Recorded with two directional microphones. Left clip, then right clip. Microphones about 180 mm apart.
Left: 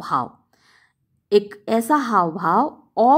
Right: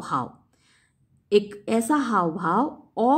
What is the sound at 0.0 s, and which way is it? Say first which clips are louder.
Speech: left 5 dB; 20° left (ahead or behind).